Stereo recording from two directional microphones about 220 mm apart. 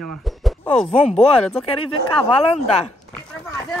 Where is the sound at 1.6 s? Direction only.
25° left (ahead or behind).